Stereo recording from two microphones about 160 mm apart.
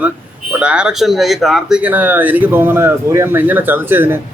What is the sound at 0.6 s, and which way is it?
Speech, 5° right (ahead or behind).